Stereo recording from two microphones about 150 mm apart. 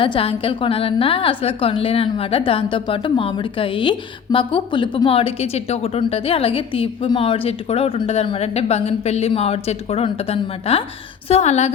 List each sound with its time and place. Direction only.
0.0 s a woman's voice: 35° left (ahead or behind)